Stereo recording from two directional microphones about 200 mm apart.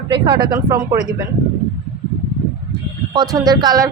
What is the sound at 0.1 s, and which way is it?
Speech, 20° right (ahead or behind).